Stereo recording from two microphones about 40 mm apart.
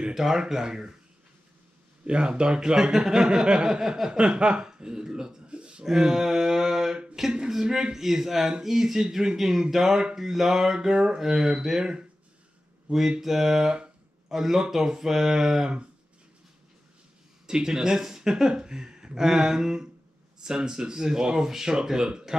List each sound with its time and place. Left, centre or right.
0.1 s speech: centre
2.0 s speech: right
5.9 s speech: centre
12.9 s speech: right
13.2 s speech: centre
17.5 s speech: centre